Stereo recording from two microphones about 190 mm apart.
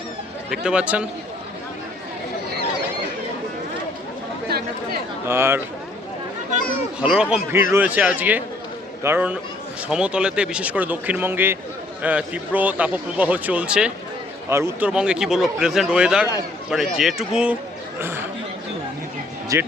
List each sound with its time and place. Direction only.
0.5 s speech: 5° right (ahead or behind)
4.4 s chatter: 55° right (ahead or behind)
5.3 s a man's voice: 15° right (ahead or behind)
7.0 s a man's voice: 5° right (ahead or behind)
19.5 s a man's voice: 15° right (ahead or behind)